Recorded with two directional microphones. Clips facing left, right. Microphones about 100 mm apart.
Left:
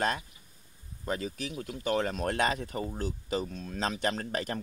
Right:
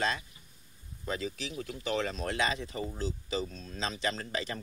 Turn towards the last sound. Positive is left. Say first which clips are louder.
# left 3 dB
turn(degrees=55)  # may be behind; listen again after turning